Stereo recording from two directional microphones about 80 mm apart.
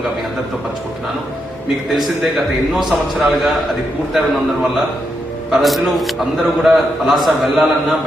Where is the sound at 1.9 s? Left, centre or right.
Centre.